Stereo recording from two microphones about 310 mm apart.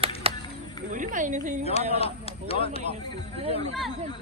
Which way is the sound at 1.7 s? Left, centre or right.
Centre.